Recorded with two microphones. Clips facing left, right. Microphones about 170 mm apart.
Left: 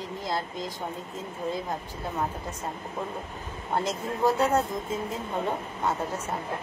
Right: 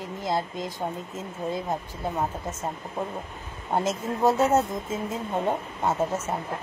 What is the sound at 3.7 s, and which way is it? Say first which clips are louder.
Speech: right 3 dB; 20° right (ahead or behind).